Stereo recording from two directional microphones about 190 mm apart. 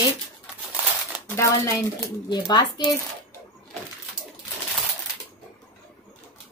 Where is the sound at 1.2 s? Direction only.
15° left (ahead or behind).